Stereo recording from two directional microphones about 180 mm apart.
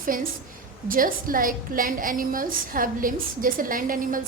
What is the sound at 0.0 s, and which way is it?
A woman's voice, 50° right (ahead or behind).